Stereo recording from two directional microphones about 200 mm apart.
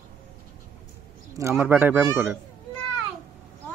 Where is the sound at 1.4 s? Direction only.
10° right (ahead or behind).